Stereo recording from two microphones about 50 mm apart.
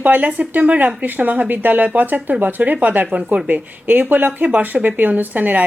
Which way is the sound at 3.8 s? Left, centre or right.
Right.